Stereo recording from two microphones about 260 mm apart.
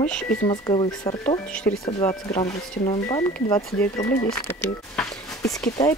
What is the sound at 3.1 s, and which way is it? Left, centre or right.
Speech, centre.